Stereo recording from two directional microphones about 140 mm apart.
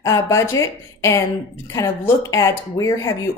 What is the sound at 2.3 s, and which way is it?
Speech, 20° left (ahead or behind).